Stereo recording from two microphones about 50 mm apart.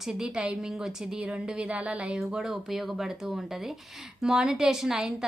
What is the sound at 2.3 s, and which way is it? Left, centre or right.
A woman's voice, centre.